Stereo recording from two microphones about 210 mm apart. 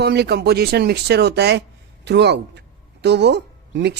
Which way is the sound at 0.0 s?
50° right (ahead or behind).